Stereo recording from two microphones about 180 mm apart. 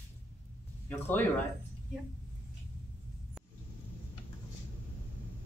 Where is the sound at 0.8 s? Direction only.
10° left (ahead or behind).